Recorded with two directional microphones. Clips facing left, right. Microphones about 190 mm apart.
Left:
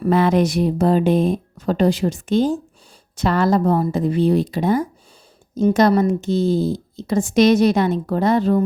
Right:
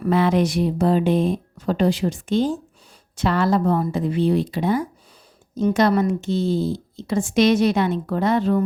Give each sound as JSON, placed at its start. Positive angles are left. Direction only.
{"t": 0.0, "sound": "speech", "side_deg": 45}